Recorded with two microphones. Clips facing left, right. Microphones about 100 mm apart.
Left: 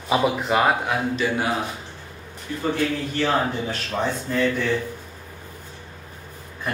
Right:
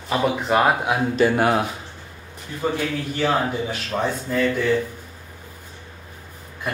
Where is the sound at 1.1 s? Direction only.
50° right (ahead or behind).